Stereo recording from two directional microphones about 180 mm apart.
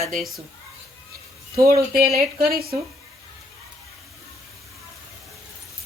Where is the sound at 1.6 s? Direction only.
55° right (ahead or behind).